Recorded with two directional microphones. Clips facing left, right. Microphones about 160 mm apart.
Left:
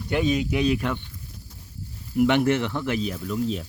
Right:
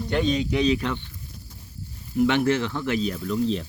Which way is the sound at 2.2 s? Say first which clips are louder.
Left 1 dB; 15° left (ahead or behind).